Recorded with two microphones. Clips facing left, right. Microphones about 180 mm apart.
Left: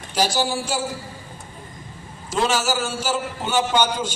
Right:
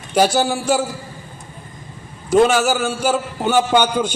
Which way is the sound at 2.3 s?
55° right (ahead or behind).